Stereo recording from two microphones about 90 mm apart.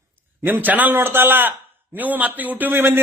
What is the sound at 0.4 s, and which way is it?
A man's voice, 20° right (ahead or behind).